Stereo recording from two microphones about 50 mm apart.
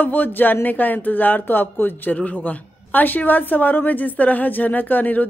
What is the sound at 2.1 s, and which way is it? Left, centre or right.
Speech, left.